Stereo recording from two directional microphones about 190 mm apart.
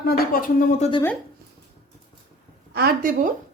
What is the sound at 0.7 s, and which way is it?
Speech, 30° left (ahead or behind).